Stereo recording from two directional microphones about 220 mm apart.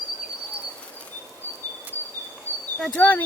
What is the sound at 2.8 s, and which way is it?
Speech, 5° left (ahead or behind).